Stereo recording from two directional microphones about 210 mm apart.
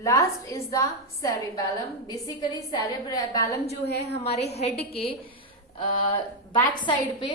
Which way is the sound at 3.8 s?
55° left (ahead or behind).